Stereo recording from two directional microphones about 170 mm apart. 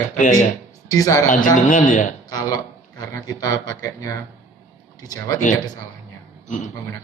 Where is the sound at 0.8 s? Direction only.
20° left (ahead or behind).